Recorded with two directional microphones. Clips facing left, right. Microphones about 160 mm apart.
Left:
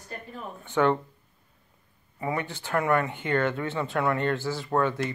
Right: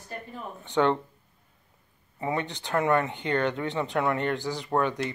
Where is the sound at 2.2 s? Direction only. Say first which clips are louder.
Right 1 dB; 20° right (ahead or behind).